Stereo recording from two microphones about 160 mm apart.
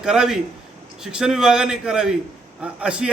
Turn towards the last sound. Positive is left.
turn(degrees=-5)  # may be behind; listen again after turning